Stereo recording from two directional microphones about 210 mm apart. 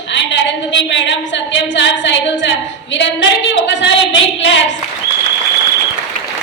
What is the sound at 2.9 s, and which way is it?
Speech, 55° left (ahead or behind).